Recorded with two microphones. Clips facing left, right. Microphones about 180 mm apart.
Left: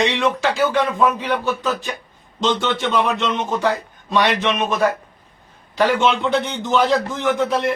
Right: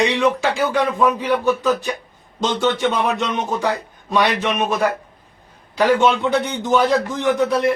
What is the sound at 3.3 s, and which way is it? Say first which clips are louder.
A man's voice: left 1 dB; 15° right (ahead or behind).